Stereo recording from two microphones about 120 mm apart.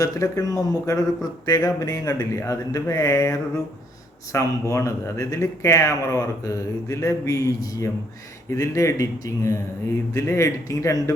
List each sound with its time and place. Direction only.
0.0 s speech: 30° left (ahead or behind)